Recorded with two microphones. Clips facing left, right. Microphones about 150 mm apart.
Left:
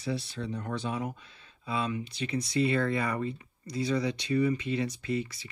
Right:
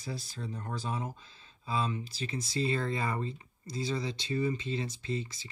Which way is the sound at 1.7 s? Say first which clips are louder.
Left 1 dB; 30° right (ahead or behind).